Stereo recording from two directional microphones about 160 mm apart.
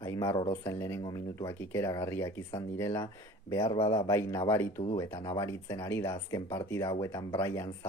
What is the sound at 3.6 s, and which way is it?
Speech, 35° left (ahead or behind).